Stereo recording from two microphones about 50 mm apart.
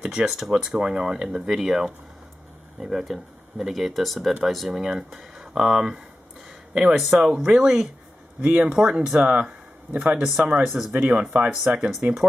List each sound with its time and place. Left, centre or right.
0.0 s speech: centre
8.4 s speech: right
10.6 s speech: centre
10.9 s speech: right
11.1 s speech: right